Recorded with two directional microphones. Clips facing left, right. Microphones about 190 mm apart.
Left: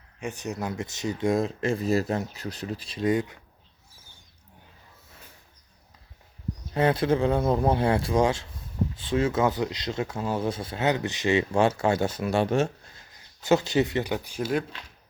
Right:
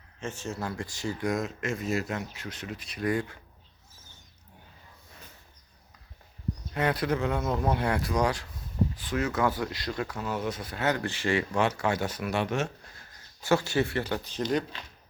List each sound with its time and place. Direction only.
0.2 s speech: 15° left (ahead or behind)
6.7 s speech: 30° left (ahead or behind)
13.1 s speech: 20° left (ahead or behind)